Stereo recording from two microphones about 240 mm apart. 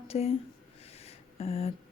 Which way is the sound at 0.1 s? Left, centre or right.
Left.